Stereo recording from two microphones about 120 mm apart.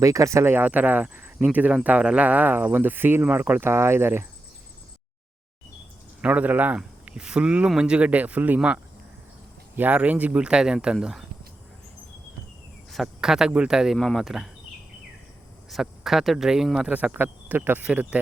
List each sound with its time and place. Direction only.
0.0 s speech: 25° right (ahead or behind)
6.2 s speech: 10° right (ahead or behind)
12.9 s speech: centre (ahead or behind)
15.7 s speech: centre (ahead or behind)